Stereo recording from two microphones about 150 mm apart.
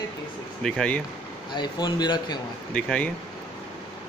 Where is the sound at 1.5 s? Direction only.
30° left (ahead or behind).